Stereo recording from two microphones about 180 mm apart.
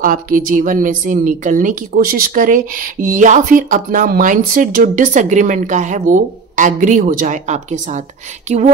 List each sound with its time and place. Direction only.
0.0 s a woman's voice: 50° right (ahead or behind)